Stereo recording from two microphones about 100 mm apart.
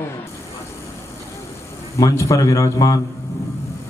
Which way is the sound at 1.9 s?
30° left (ahead or behind).